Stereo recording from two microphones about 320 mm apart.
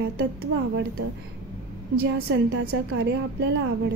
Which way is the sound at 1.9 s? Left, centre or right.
Right.